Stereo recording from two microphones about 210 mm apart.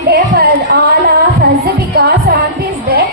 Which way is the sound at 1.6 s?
45° right (ahead or behind).